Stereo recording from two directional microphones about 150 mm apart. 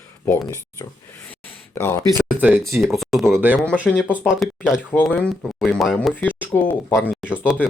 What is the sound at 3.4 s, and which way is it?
Speech, 10° right (ahead or behind).